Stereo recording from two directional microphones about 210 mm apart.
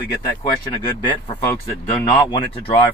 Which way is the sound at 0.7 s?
20° left (ahead or behind).